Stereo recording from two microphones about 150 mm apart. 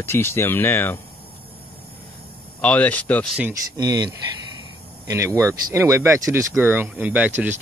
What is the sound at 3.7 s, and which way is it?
Speech, 25° right (ahead or behind).